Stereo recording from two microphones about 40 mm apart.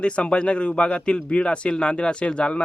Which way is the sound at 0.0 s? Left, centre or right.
Left.